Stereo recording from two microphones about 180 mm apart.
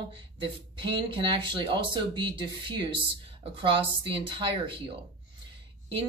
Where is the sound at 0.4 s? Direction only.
25° right (ahead or behind).